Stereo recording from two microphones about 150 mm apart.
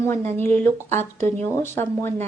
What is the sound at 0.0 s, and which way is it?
A woman's voice, 20° left (ahead or behind).